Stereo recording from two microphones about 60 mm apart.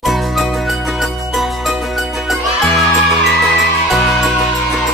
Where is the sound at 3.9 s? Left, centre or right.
Centre.